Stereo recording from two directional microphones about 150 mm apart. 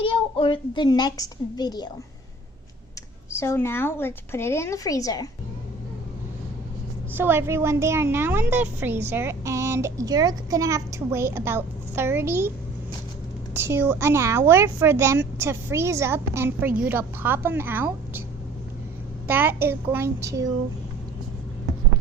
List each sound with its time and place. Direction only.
0.0 s a woman's voice: 35° left (ahead or behind)
3.3 s speech: 15° left (ahead or behind)
7.1 s a woman's voice: 15° right (ahead or behind)
13.5 s a woman's voice: 15° right (ahead or behind)
19.3 s a woman's voice: 15° right (ahead or behind)